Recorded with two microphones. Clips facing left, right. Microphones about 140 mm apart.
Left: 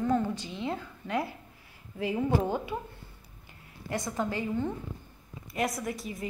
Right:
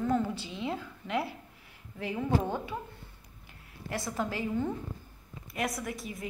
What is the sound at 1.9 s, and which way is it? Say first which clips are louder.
Speech: left 2 dB; 5° left (ahead or behind).